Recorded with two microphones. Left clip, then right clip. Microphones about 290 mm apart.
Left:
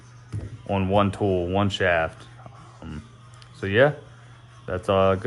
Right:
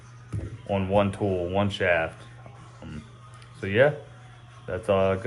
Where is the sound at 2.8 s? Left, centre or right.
Left.